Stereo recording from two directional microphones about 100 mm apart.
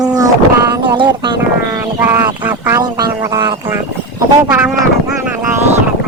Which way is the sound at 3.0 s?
45° right (ahead or behind).